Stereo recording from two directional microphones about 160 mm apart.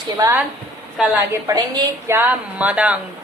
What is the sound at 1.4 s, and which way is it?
Speech, 20° right (ahead or behind).